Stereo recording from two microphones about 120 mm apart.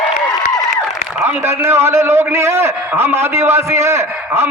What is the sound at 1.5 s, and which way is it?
A man's voice, 20° right (ahead or behind).